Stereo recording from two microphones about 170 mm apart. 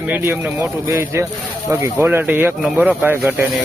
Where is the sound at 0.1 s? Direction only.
10° right (ahead or behind).